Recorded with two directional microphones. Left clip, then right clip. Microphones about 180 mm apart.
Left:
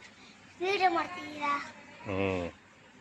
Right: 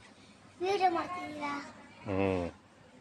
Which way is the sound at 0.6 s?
15° left (ahead or behind).